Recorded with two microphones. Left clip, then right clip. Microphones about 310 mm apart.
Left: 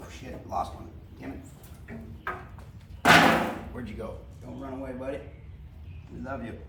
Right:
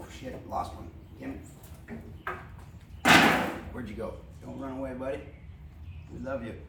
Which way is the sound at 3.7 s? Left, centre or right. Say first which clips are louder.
Right 1 dB; centre.